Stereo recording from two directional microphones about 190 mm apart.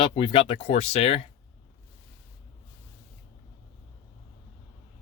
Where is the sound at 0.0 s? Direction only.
25° left (ahead or behind).